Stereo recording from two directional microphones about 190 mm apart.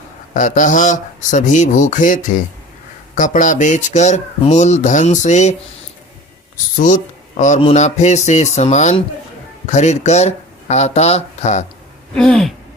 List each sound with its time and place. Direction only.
0.3 s speech: 40° left (ahead or behind)
6.7 s speech: 40° left (ahead or behind)
12.1 s a sound: 5° left (ahead or behind)